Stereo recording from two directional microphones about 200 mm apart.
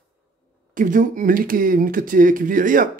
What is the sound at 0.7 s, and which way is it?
Speech, 40° right (ahead or behind).